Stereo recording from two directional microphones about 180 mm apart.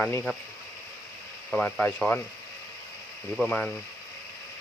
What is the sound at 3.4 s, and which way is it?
Speech, 5° left (ahead or behind).